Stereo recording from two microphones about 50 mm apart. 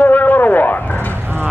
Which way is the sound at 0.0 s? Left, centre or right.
Left.